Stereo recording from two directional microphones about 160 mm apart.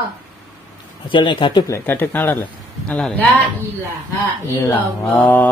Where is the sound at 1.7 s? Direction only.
10° left (ahead or behind).